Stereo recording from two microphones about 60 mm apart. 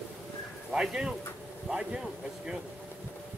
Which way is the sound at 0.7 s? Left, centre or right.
Centre.